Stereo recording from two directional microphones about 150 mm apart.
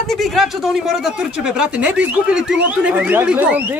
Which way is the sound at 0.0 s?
Centre (ahead or behind).